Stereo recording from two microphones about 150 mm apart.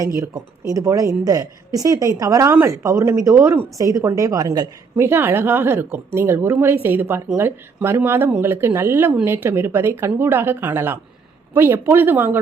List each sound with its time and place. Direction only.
0.2 s a woman's voice: 20° right (ahead or behind)